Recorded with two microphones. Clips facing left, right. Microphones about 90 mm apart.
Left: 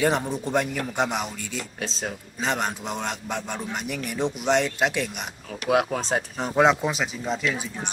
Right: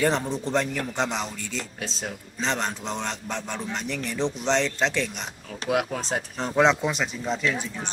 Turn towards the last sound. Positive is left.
turn(degrees=5)  # may be behind; listen again after turning